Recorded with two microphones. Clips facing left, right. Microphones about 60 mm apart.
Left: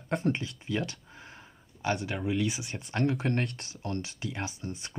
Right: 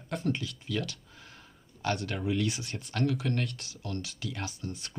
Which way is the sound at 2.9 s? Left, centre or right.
Left.